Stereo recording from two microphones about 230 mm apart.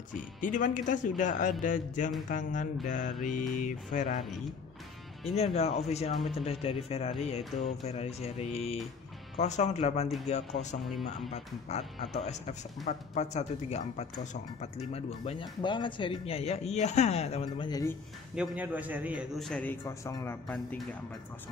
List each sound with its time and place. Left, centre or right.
0.4 s speech: left
5.4 s speech: left
18.3 s a man's voice: centre